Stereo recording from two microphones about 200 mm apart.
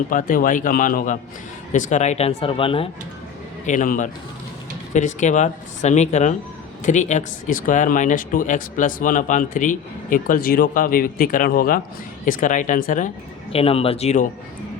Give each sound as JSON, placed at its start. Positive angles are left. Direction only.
{"t": 0.1, "sound": "speech", "side_deg": 40}
{"t": 3.7, "sound": "speech", "side_deg": 40}
{"t": 13.5, "sound": "speech", "side_deg": 30}